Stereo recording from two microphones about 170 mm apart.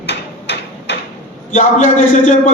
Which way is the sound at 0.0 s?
85° left.